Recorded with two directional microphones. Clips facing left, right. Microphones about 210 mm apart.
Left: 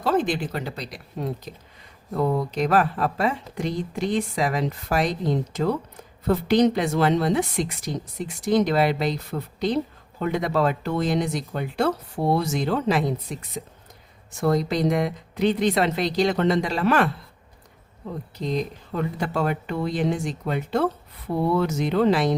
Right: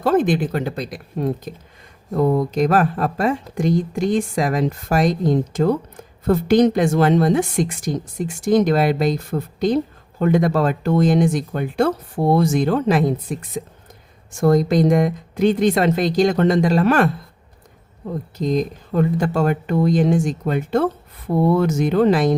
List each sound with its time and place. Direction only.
0.0 s speech: 50° right (ahead or behind)
18.3 s speech: 45° right (ahead or behind)